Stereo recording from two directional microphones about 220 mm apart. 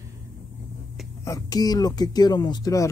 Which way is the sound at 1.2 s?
15° left (ahead or behind).